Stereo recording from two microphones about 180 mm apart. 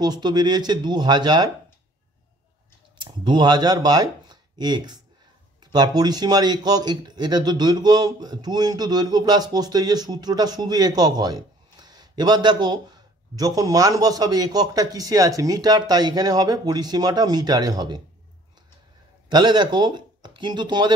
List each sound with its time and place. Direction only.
0.0 s a man's voice: 25° right (ahead or behind)
3.0 s a man's voice: 25° right (ahead or behind)
19.2 s speech: 25° right (ahead or behind)